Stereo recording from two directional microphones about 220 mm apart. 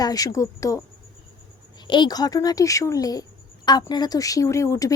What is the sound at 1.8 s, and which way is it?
A woman's voice, 20° left (ahead or behind).